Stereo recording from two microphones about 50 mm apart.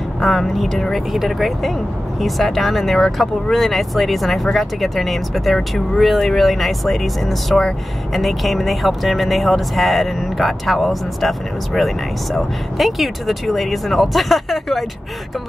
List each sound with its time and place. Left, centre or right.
0.2 s speech: centre